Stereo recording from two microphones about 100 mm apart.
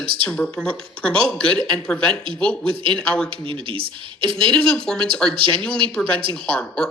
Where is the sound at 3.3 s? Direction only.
60° right (ahead or behind).